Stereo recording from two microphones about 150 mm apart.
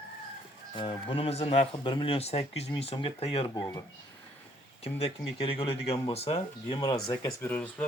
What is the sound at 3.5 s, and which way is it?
Speech, 25° left (ahead or behind).